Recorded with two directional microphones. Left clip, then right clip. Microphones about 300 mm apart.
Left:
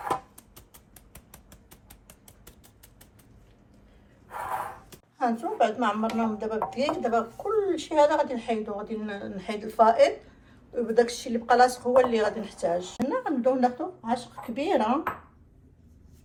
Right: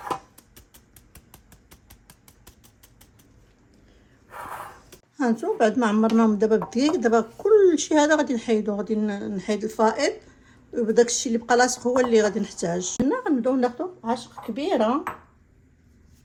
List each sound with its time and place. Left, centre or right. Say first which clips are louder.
1.7 s a sound: right 3 dB; centre
4.3 s gasp: left 4 dB; centre
5.1 s a woman's voice: right 2 dB; right